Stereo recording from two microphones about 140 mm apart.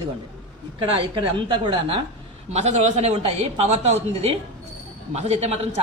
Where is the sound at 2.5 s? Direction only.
50° right (ahead or behind).